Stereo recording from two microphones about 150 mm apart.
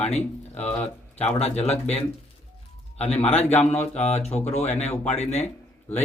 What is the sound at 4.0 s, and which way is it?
Speech, 45° left (ahead or behind).